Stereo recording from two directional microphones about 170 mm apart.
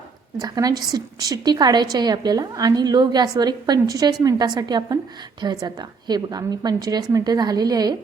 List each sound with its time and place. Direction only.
0.3 s a woman's voice: 20° right (ahead or behind)